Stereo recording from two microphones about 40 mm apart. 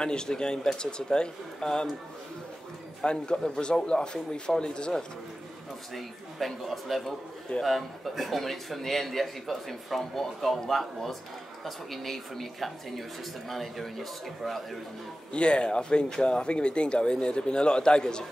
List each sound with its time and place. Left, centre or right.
0.0 s speech: centre
3.0 s speech: left
5.9 s a man's voice: centre
15.3 s speech: left